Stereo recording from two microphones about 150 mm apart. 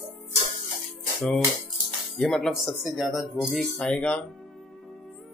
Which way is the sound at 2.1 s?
5° left (ahead or behind).